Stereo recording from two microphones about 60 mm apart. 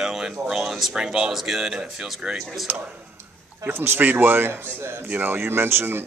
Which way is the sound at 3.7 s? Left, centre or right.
Right.